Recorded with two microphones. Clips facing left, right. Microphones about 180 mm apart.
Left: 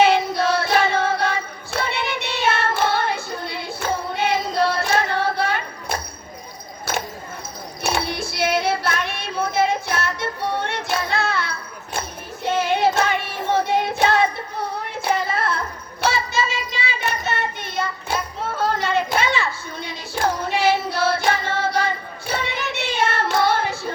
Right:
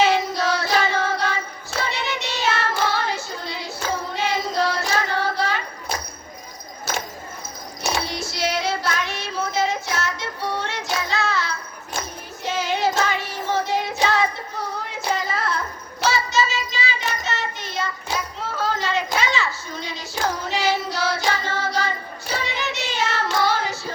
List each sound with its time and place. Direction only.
0.0 s child singing: 55° left (ahead or behind)
1.0 s music: 55° left (ahead or behind)
7.8 s child singing: 60° left (ahead or behind)